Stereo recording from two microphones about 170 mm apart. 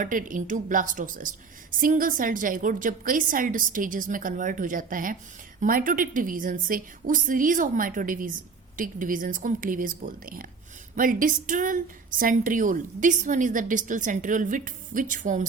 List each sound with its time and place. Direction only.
0.0 s a woman's voice: 50° right (ahead or behind)